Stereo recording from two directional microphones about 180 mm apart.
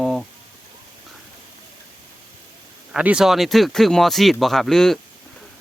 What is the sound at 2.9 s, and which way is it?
Speech, 5° right (ahead or behind).